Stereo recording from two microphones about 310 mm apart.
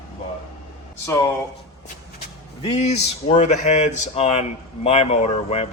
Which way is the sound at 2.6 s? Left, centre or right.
Left.